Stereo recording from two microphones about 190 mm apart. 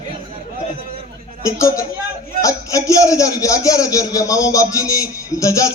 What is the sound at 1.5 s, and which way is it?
A man's voice, 15° left (ahead or behind).